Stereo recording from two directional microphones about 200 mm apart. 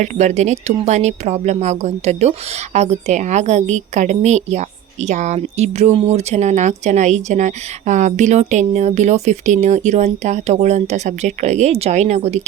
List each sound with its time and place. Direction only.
0.0 s a woman's voice: 35° right (ahead or behind)